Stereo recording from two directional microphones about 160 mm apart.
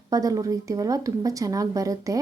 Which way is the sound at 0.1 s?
20° right (ahead or behind).